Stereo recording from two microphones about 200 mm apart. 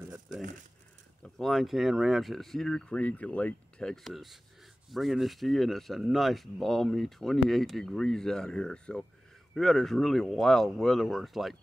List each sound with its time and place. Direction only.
1.2 s speech: centre (ahead or behind)